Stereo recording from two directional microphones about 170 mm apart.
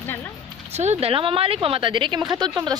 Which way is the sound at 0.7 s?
40° right (ahead or behind).